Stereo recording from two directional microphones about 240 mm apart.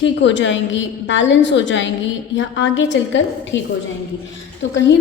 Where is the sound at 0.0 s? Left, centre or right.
Left.